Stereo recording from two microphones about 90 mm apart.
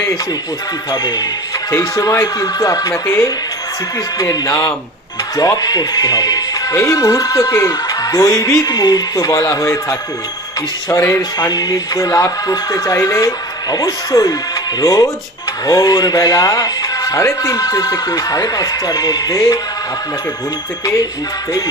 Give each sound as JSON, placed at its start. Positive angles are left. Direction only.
{"t": 0.9, "sound": "speech", "side_deg": 45}
{"t": 2.0, "sound": "speech", "side_deg": 35}
{"t": 2.9, "sound": "speech", "side_deg": 25}
{"t": 11.3, "sound": "speech", "side_deg": 45}